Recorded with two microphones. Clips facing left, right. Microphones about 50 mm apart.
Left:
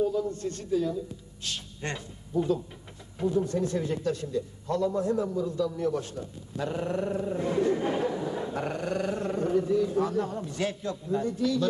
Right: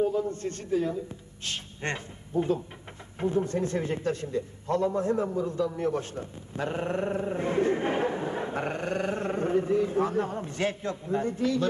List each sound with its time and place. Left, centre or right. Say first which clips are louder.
0.0 s a man's voice: right 1 dB; right